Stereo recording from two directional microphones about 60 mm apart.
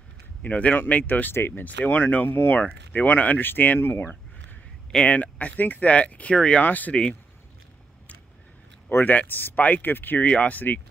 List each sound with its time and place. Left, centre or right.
0.4 s speech: left
1.3 s speech: left
2.6 s speech: left
5.0 s speech: left
8.8 s speech: left
10.2 s speech: left